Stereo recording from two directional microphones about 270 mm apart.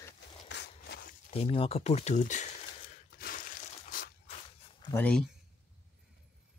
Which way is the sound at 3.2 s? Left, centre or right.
Left.